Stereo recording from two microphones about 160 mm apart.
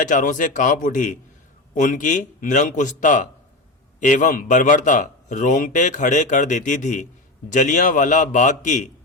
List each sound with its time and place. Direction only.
0.0 s a man's voice: 55° left (ahead or behind)